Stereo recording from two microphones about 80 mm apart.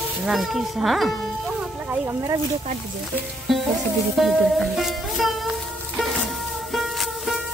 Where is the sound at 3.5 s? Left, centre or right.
Centre.